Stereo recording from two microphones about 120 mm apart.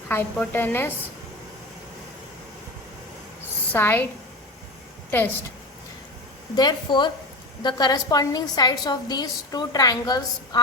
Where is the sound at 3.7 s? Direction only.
15° left (ahead or behind).